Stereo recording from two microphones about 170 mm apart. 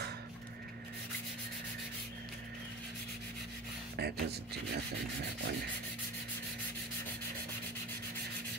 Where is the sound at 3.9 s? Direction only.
75° right (ahead or behind).